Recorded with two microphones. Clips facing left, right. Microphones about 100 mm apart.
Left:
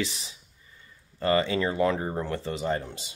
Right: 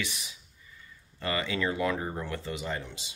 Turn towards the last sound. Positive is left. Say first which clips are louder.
# left 6 dB
turn(degrees=45)  # may be behind; listen again after turning